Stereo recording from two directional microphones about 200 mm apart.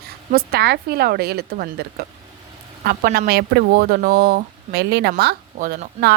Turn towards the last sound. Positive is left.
turn(degrees=-50)  # may be behind; listen again after turning